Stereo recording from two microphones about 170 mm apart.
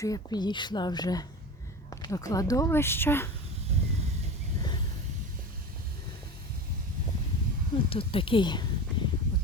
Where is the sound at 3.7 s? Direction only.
40° right (ahead or behind).